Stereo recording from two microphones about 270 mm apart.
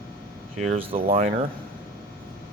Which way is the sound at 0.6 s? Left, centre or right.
Right.